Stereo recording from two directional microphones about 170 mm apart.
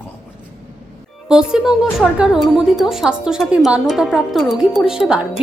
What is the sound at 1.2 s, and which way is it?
A woman's voice, 5° right (ahead or behind).